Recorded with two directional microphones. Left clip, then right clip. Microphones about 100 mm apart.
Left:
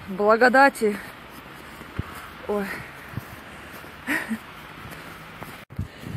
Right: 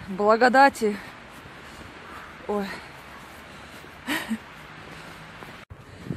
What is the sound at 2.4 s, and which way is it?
Speech, 25° right (ahead or behind).